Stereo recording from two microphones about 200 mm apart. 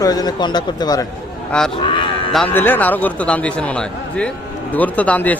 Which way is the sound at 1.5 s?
5° left (ahead or behind).